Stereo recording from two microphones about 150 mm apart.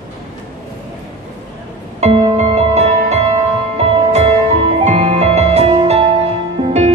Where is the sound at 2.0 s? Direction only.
40° right (ahead or behind).